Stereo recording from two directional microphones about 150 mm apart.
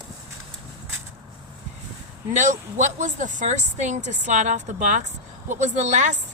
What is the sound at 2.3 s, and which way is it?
Speech, 55° right (ahead or behind).